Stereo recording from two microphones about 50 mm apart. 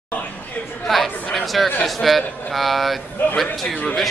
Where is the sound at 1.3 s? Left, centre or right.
Centre.